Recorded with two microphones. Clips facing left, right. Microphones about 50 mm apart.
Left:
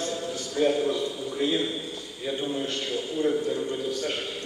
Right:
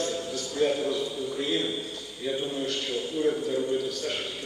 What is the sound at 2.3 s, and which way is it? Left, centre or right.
Speech, centre.